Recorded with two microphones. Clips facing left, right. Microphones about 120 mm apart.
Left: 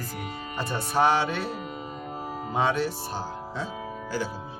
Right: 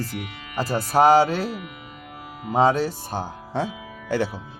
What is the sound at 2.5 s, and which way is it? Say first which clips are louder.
Speech: right 7 dB; 35° right (ahead or behind).